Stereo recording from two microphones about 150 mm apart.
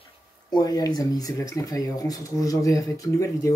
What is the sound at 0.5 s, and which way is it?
Speech, 25° left (ahead or behind).